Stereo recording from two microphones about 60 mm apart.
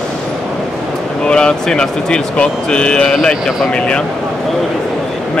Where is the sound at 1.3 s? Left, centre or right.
Centre.